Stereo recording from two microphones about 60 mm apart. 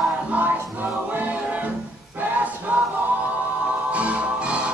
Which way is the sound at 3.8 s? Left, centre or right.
Right.